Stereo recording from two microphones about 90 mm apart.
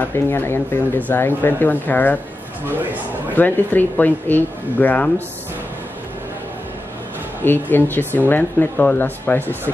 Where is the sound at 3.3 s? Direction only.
20° left (ahead or behind).